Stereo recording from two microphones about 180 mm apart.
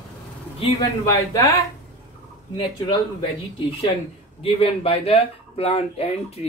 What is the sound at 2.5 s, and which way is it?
Speech, 25° left (ahead or behind).